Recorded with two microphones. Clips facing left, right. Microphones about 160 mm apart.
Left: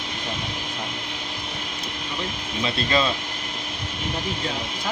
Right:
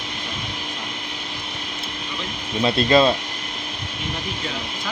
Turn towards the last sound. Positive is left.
turn(degrees=-35)  # may be behind; listen again after turning